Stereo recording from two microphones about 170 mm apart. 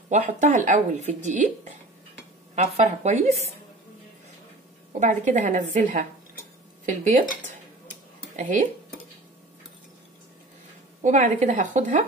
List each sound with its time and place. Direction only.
0.1 s speech: 45° right (ahead or behind)
5.0 s speech: 45° right (ahead or behind)
11.0 s speech: 45° right (ahead or behind)